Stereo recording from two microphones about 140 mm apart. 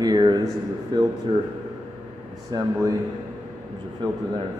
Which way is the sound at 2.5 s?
25° right (ahead or behind).